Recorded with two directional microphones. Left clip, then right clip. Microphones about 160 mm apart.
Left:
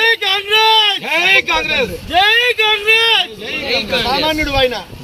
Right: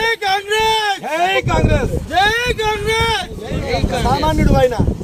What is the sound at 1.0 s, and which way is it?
Speech, 25° right (ahead or behind).